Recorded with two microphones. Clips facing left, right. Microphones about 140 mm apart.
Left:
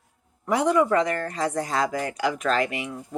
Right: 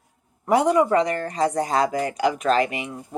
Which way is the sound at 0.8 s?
25° right (ahead or behind).